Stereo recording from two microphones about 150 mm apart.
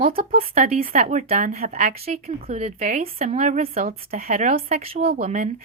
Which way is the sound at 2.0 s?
45° right (ahead or behind).